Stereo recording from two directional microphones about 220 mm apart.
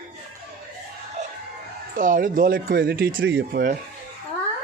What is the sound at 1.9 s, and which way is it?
Speech, 40° right (ahead or behind).